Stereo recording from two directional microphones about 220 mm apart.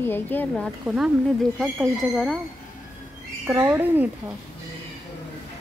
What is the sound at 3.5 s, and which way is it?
Speech, 10° right (ahead or behind).